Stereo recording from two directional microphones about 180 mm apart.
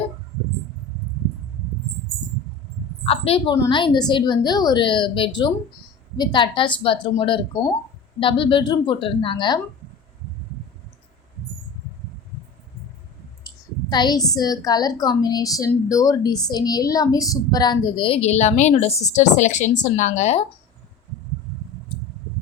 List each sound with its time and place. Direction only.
3.1 s a woman's voice: 30° left (ahead or behind)
13.9 s a woman's voice: 25° left (ahead or behind); by 20.4 s 40° left (ahead or behind)